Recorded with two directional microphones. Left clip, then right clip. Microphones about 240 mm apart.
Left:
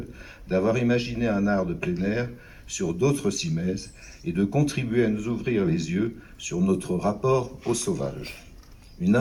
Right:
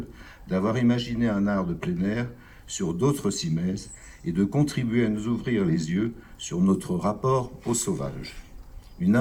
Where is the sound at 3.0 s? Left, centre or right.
Right.